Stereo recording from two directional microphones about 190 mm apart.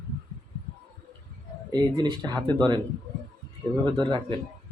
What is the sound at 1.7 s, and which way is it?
Speech, 20° right (ahead or behind).